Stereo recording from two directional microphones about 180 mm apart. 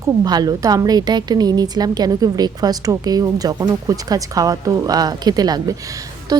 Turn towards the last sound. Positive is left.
turn(degrees=-20)  # may be behind; listen again after turning